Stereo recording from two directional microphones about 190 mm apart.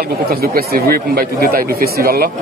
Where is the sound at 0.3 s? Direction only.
50° right (ahead or behind).